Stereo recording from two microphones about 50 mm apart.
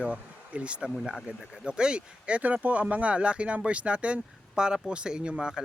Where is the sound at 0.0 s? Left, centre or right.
Right.